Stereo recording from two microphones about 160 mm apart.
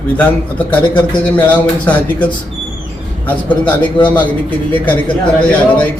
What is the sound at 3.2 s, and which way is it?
A man's voice, 10° left (ahead or behind).